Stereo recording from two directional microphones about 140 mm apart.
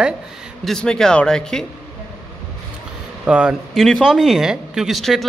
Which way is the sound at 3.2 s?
5° right (ahead or behind).